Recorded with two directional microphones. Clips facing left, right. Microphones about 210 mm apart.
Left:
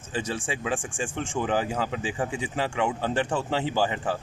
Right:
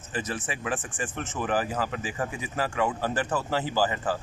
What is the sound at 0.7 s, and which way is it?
Speech, 15° left (ahead or behind).